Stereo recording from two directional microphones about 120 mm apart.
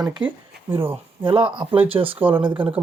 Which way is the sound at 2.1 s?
15° right (ahead or behind).